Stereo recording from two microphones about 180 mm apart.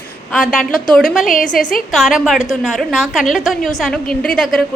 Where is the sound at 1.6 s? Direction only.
50° left (ahead or behind).